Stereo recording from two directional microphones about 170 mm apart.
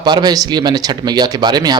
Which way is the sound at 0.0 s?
25° right (ahead or behind).